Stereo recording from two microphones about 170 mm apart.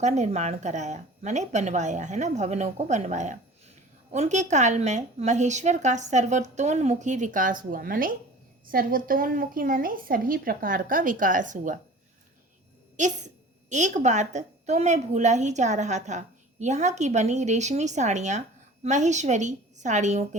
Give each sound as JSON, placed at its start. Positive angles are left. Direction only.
{"t": 0.0, "sound": "a woman's voice", "side_deg": -40}
{"t": 13.0, "sound": "a woman's voice", "side_deg": -45}